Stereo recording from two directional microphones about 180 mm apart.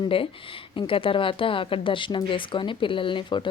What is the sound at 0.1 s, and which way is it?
Speech, 30° left (ahead or behind).